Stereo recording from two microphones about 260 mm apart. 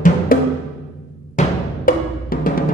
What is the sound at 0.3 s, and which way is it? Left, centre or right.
Music, left.